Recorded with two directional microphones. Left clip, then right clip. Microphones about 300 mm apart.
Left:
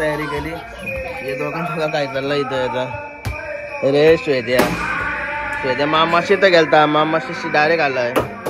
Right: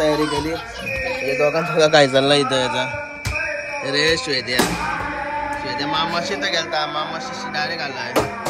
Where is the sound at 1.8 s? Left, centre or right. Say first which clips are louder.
Right 8 dB; right; by 2.9 s centre.